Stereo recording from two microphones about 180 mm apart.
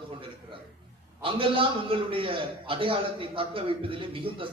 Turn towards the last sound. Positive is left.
turn(degrees=-30)  # may be behind; listen again after turning